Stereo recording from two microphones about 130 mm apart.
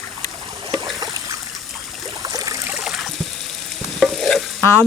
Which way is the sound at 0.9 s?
30° right (ahead or behind).